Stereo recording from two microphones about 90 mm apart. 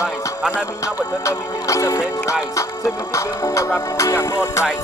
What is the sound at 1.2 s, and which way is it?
Music, 35° left (ahead or behind).